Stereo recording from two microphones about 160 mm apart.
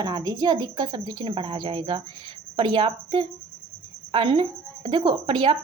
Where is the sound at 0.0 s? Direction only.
25° right (ahead or behind).